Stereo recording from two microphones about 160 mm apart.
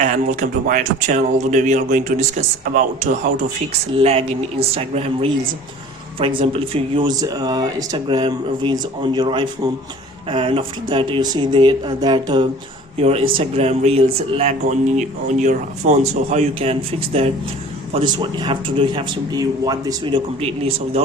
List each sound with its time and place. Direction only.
0.0 s speech: 50° right (ahead or behind)
3.9 s speech: 35° right (ahead or behind)
6.4 s speech: 35° right (ahead or behind)
17.9 s speech: 30° right (ahead or behind)